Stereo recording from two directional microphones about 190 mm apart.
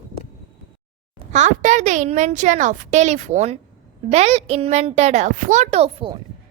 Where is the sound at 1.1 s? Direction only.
40° right (ahead or behind).